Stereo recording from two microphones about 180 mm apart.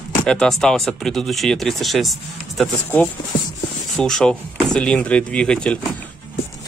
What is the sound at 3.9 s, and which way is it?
Speech, 5° left (ahead or behind).